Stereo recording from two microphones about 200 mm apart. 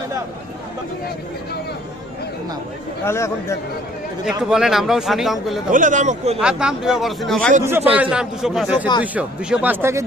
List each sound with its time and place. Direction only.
3.1 s a man's voice: 15° left (ahead or behind)
4.3 s speech: 5° right (ahead or behind)
5.7 s a man's voice: 40° right (ahead or behind)
6.4 s speech: 5° right (ahead or behind)
7.6 s speech: 10° right (ahead or behind)